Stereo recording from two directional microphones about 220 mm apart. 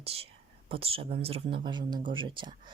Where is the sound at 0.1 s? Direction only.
25° right (ahead or behind).